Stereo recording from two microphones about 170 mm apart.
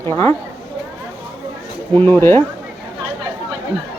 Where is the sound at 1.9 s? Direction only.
10° left (ahead or behind).